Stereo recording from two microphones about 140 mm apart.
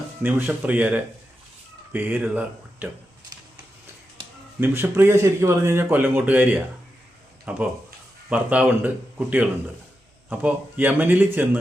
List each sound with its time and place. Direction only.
0.2 s speech: 15° right (ahead or behind)
4.2 s a sound: 35° right (ahead or behind)
4.6 s speech: 15° right (ahead or behind)